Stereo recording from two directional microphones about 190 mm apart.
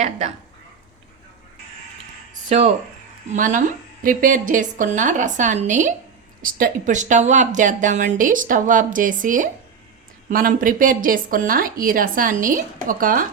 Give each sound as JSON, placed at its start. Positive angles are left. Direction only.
{"t": 2.5, "sound": "a woman's voice", "side_deg": -35}